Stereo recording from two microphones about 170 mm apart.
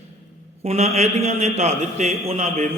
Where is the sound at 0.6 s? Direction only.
40° right (ahead or behind).